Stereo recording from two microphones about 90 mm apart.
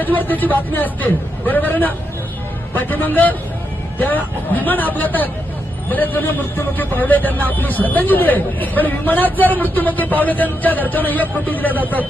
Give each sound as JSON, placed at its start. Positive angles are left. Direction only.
{"t": 0.0, "sound": "a man's voice", "side_deg": 20}